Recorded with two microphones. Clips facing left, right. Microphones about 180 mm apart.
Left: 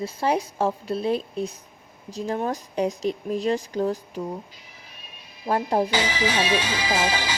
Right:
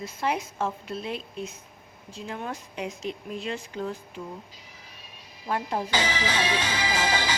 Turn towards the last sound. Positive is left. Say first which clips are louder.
# left 2 dB
turn(degrees=10)  # may be behind; listen again after turning